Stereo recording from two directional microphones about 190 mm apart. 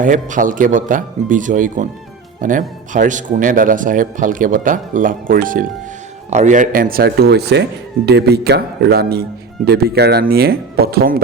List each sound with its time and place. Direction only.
0.0 s speech: 45° right (ahead or behind)